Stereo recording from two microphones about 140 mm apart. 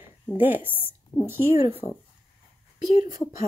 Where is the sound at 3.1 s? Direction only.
25° right (ahead or behind).